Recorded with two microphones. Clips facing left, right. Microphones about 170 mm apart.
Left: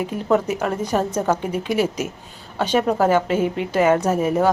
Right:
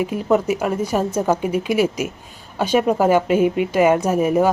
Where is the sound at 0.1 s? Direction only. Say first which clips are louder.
Right 2 dB; 10° right (ahead or behind).